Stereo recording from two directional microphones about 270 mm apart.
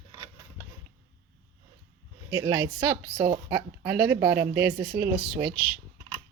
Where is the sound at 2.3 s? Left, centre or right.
Centre.